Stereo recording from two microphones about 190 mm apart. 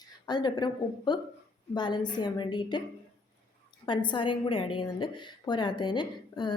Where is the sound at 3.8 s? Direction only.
25° left (ahead or behind).